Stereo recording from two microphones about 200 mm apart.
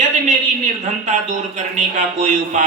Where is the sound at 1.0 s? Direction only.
35° right (ahead or behind).